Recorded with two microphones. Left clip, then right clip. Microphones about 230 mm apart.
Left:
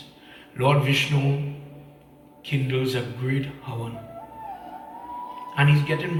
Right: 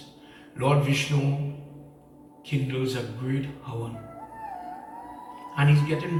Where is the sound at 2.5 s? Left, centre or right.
Left.